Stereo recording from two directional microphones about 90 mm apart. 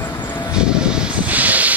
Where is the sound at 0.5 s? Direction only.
10° right (ahead or behind).